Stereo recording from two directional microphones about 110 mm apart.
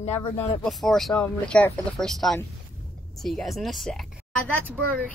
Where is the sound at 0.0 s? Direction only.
85° left.